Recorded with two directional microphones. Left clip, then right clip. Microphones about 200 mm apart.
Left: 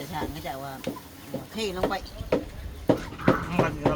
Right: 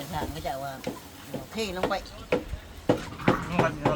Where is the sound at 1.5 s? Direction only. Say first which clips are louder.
Left 1 dB; 20° right (ahead or behind).